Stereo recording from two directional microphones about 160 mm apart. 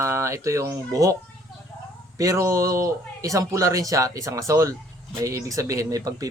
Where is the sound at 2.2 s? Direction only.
20° right (ahead or behind).